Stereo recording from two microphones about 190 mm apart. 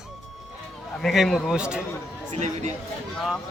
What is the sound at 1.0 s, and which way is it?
Speech, centre (ahead or behind).